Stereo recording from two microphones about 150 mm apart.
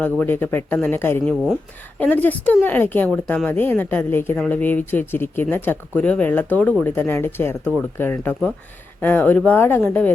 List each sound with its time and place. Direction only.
0.0 s speech: 10° left (ahead or behind)
1.2 s speech: 5° left (ahead or behind)